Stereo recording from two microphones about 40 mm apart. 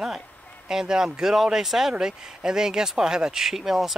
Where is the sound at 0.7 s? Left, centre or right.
Centre.